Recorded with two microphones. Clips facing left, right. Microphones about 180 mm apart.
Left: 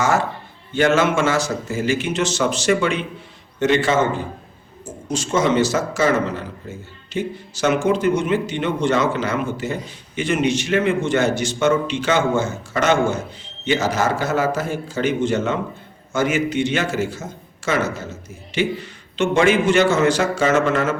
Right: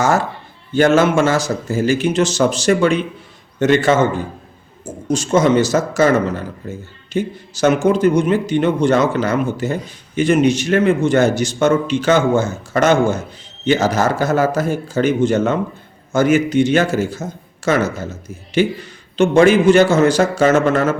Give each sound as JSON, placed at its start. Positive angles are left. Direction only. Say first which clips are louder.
{"t": 0.7, "sound": "a man's voice", "louder": "right 4 dB", "side_deg": -40}
{"t": 5.1, "sound": "a man's voice", "louder": "right 4 dB", "side_deg": -40}